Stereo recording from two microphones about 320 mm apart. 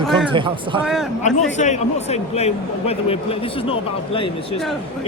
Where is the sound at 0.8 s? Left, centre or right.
Centre.